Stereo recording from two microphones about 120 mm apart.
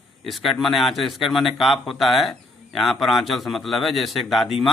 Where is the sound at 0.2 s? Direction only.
Centre (ahead or behind).